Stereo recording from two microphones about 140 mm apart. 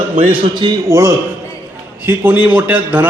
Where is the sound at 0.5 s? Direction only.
30° right (ahead or behind).